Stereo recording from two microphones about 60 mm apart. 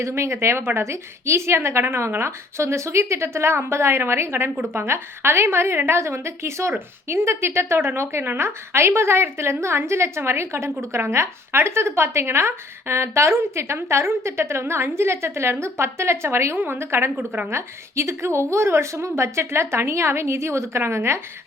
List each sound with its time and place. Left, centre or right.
0.0 s a woman's voice: right
17.2 s a woman's voice: right
17.5 s a woman's voice: right